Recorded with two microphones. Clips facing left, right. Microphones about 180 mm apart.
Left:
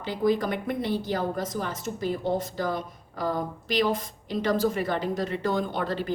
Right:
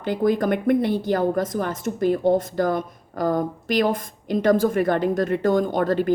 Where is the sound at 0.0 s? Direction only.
50° right (ahead or behind).